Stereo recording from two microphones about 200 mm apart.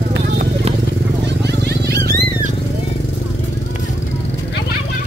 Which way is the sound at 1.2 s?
60° right (ahead or behind).